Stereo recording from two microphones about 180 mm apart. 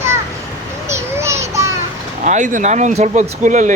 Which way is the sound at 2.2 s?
45° right (ahead or behind).